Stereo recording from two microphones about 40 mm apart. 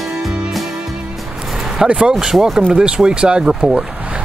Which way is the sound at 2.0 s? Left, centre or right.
Centre.